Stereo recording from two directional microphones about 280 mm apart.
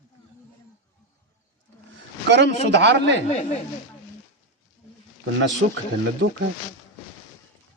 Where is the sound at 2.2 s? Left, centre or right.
Right.